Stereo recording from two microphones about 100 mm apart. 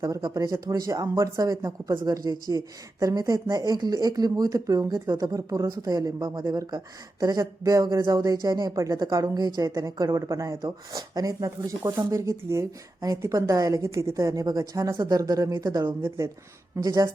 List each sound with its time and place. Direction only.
0.0 s a woman's voice: 40° right (ahead or behind)